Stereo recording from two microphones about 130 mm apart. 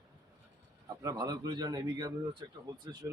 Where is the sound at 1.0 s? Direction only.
30° right (ahead or behind).